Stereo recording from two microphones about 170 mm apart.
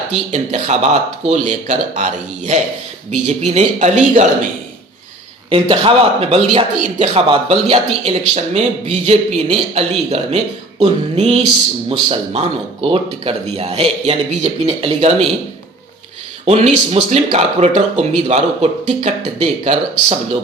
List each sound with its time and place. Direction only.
0.1 s speech: 40° right (ahead or behind)
5.5 s speech: 30° right (ahead or behind)
16.5 s speech: 40° right (ahead or behind)